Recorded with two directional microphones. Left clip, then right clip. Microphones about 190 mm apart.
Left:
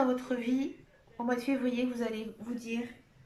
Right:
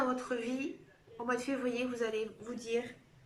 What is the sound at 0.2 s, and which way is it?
Speech, 25° left (ahead or behind).